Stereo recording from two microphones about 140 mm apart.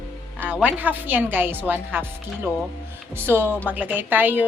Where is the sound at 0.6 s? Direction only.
15° right (ahead or behind).